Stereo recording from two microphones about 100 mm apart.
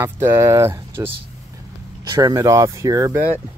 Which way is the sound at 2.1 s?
40° right (ahead or behind).